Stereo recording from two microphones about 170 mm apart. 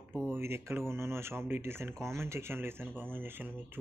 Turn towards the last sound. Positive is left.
turn(degrees=-10)  # may be behind; listen again after turning